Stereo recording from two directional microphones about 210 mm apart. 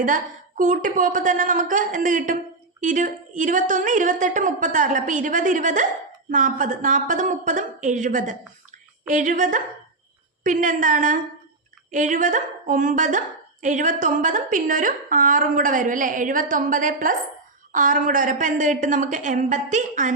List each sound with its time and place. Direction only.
0.0 s a woman's voice: 40° right (ahead or behind)